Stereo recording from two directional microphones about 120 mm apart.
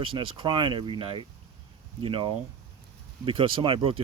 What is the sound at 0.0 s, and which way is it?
Speech, 45° right (ahead or behind).